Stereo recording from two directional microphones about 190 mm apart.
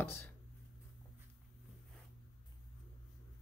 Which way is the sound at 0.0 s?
10° left (ahead or behind).